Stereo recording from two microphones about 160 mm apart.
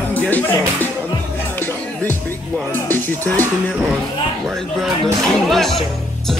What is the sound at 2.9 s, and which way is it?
Speech, 10° left (ahead or behind).